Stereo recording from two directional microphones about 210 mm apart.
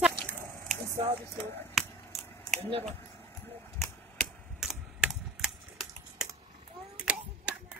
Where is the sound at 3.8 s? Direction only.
Centre (ahead or behind).